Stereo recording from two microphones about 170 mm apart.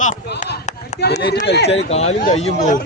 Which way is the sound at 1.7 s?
40° left (ahead or behind).